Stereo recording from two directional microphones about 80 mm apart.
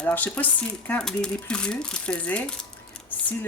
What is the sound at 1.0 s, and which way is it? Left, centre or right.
Speech, centre.